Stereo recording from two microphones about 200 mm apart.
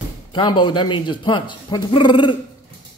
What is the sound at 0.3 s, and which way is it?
Speech, 25° left (ahead or behind).